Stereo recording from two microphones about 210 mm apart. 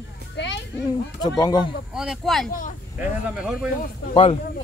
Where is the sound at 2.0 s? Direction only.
Centre (ahead or behind).